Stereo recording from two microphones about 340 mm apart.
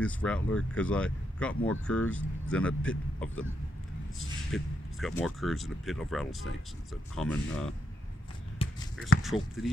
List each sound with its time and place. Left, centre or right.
0.0 s speech: centre
8.6 s a sound: centre
9.2 s speech: centre